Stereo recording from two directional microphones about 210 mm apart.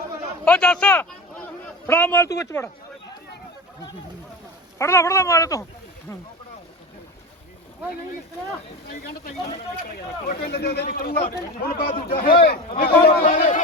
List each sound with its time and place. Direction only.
0.4 s a man's voice: 5° left (ahead or behind)
4.8 s speech: 15° left (ahead or behind)
8.9 s speech: 45° left (ahead or behind)